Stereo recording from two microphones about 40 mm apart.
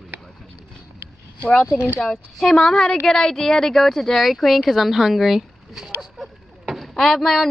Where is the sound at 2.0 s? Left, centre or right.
Centre.